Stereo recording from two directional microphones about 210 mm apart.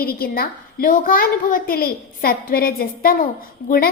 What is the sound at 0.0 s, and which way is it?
A woman's voice, 45° left (ahead or behind).